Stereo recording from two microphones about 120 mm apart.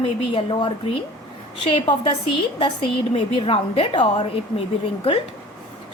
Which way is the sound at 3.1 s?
50° left (ahead or behind).